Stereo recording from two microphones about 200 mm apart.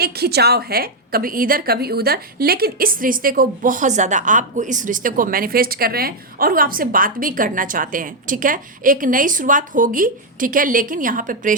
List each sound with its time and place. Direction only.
0.0 s a woman's voice: 50° right (ahead or behind)